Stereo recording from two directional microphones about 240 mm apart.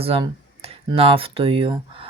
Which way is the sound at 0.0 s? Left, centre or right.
Right.